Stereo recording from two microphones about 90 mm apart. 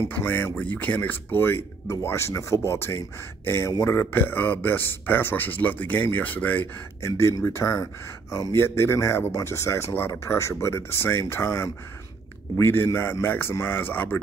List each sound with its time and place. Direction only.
0.0 s speech: 20° left (ahead or behind)
7.1 s speech: 35° left (ahead or behind)